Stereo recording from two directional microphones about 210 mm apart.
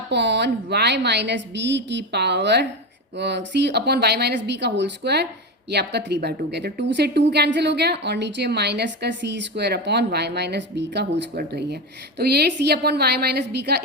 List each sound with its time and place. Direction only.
0.1 s a woman's voice: 55° right (ahead or behind)